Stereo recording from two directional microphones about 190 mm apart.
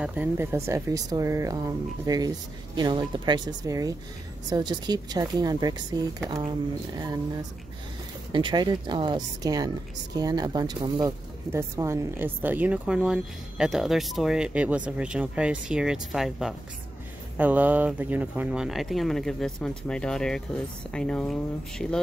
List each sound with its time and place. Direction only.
0.0 s speech: 10° right (ahead or behind)
8.3 s speech: 25° right (ahead or behind); by 22.0 s 5° left (ahead or behind)